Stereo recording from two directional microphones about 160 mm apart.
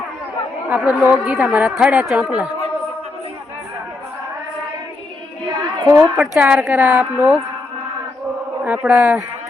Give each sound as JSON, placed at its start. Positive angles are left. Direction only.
{"t": 0.7, "sound": "a woman's voice", "side_deg": -10}
{"t": 5.5, "sound": "a sound", "side_deg": -25}
{"t": 6.0, "sound": "a woman's voice", "side_deg": -5}
{"t": 8.6, "sound": "a woman's voice", "side_deg": -10}